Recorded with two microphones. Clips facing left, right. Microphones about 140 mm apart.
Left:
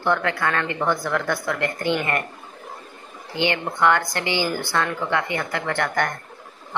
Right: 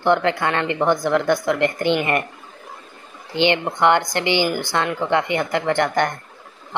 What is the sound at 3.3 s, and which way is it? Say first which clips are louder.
Speech: right 5 dB; 25° right (ahead or behind).